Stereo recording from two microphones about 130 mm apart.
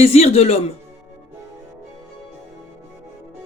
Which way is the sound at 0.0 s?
55° left (ahead or behind).